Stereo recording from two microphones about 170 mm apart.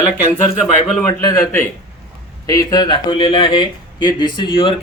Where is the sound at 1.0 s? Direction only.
15° left (ahead or behind).